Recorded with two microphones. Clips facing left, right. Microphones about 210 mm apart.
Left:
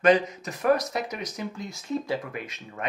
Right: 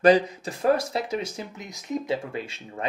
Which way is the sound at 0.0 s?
30° right (ahead or behind).